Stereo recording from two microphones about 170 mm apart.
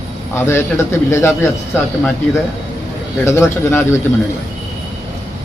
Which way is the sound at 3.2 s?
15° left (ahead or behind).